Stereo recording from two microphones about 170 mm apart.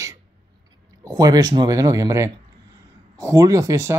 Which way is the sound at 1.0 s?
20° right (ahead or behind).